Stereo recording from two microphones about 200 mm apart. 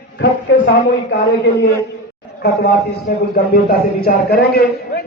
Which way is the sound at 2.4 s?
50° left (ahead or behind).